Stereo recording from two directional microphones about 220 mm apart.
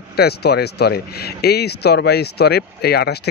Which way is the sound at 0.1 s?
45° left (ahead or behind).